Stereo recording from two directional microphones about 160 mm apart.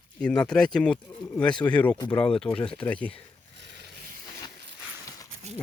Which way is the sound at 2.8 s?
10° left (ahead or behind).